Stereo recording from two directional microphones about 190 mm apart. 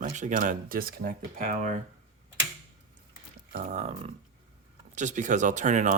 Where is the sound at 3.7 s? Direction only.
35° right (ahead or behind).